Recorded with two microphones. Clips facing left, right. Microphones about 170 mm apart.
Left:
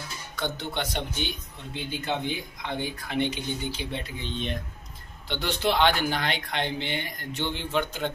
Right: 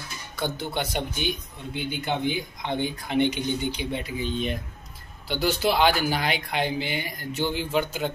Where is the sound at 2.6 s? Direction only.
20° right (ahead or behind).